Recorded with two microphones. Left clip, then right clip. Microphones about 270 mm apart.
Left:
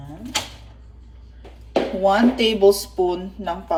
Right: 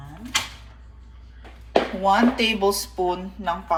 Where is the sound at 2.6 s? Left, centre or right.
Centre.